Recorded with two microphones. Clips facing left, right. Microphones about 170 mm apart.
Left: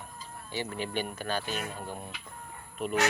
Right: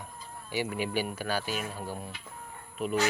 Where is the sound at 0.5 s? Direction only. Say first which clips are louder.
Right 3 dB; 10° right (ahead or behind).